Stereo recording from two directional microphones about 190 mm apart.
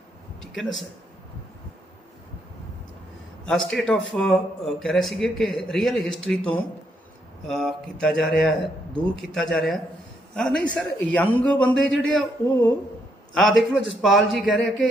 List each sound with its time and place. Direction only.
0.5 s a man's voice: centre (ahead or behind)
3.4 s a man's voice: 5° left (ahead or behind)
13.3 s a man's voice: centre (ahead or behind)